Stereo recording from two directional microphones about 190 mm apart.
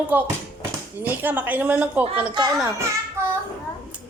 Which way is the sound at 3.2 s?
15° right (ahead or behind).